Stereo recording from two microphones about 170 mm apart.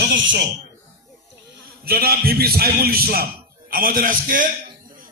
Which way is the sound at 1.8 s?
65° right (ahead or behind).